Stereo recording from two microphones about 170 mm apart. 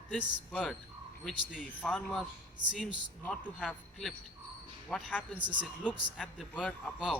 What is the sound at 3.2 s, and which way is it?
Speech, 10° left (ahead or behind).